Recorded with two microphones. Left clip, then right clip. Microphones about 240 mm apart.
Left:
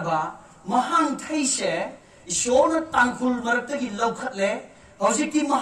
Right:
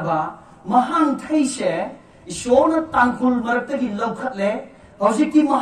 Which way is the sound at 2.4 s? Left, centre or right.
Left.